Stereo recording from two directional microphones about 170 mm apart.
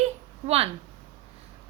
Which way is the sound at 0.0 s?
35° right (ahead or behind).